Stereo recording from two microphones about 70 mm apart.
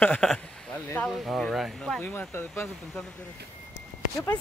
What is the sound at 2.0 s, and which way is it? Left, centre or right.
Speech, left.